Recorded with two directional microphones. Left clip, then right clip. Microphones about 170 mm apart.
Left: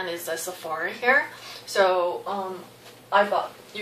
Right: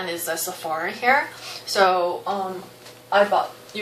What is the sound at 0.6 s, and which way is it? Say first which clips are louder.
Speech: right 5 dB; 25° right (ahead or behind).